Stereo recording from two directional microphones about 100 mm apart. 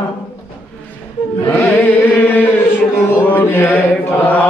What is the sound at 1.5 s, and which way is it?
Chant, 20° left (ahead or behind).